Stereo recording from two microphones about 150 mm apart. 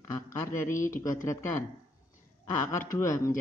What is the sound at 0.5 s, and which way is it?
Speech, 15° left (ahead or behind).